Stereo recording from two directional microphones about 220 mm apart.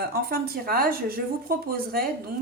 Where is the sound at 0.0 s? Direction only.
45° right (ahead or behind).